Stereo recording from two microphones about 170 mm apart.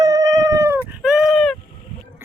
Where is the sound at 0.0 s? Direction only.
20° right (ahead or behind).